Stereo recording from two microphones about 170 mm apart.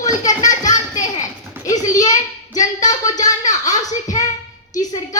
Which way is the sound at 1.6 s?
20° left (ahead or behind).